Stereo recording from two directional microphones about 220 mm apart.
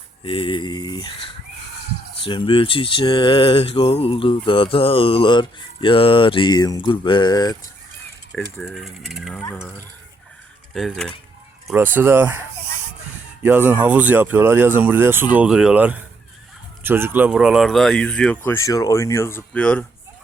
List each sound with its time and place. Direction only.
0.3 s speech: 25° left (ahead or behind)
2.2 s speech: 25° left (ahead or behind)
8.6 s speech: centre (ahead or behind)
9.4 s speech: 10° left (ahead or behind); by 12.4 s 10° right (ahead or behind)
13.4 s speech: 10° right (ahead or behind)